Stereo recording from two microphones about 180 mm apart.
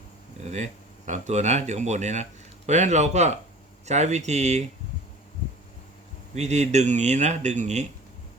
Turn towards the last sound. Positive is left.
turn(degrees=-40)  # may be behind; listen again after turning